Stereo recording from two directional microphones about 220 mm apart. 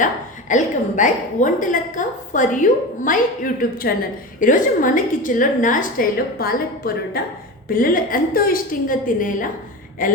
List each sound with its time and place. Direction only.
0.0 s a woman's voice: 35° left (ahead or behind)